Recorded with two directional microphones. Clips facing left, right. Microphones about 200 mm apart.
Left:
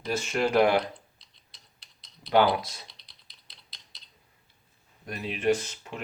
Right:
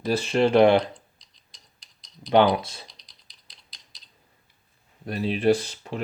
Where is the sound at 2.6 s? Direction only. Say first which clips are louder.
Right 2 dB; 30° right (ahead or behind).